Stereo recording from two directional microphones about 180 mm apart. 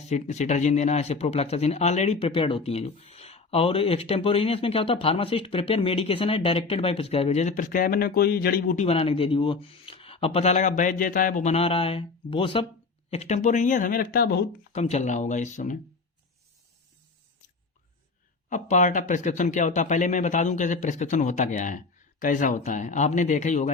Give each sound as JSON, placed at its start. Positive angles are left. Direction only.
{"t": 0.1, "sound": "speech", "side_deg": 40}
{"t": 11.5, "sound": "speech", "side_deg": 30}
{"t": 14.7, "sound": "speech", "side_deg": 40}
{"t": 18.4, "sound": "speech", "side_deg": 45}